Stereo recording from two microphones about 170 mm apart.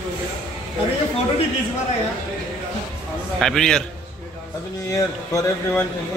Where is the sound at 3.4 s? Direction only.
5° left (ahead or behind).